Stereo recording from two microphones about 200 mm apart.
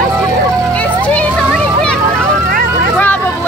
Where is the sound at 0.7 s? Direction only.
5° left (ahead or behind).